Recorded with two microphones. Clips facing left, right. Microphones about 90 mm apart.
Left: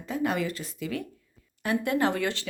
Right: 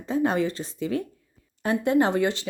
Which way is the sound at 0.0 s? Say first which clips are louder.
Right 5 dB; 30° right (ahead or behind).